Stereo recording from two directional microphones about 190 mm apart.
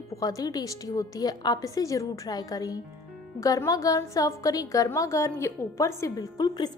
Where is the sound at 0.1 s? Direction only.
15° left (ahead or behind).